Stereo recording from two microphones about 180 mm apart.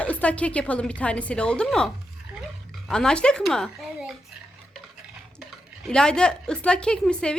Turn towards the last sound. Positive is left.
turn(degrees=5)  # may be behind; listen again after turning